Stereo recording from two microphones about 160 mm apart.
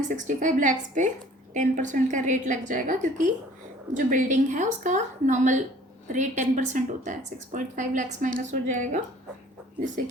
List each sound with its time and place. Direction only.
0.0 s a woman's voice: 50° right (ahead or behind)